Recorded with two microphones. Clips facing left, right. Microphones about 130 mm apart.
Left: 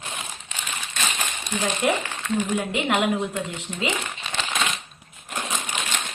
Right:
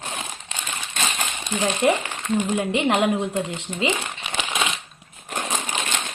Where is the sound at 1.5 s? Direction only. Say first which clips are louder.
Right 3 dB; 25° right (ahead or behind).